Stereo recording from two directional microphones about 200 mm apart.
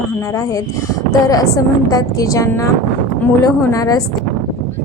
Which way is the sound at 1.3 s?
15° left (ahead or behind).